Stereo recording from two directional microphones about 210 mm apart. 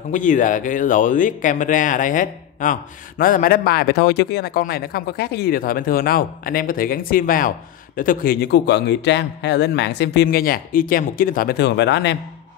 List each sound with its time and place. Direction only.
0.1 s speech: 40° left (ahead or behind); by 12.2 s 55° left (ahead or behind)